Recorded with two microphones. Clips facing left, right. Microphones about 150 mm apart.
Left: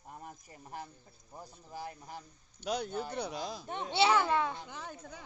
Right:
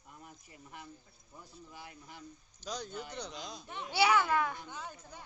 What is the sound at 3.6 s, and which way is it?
A child's voice, 30° left (ahead or behind).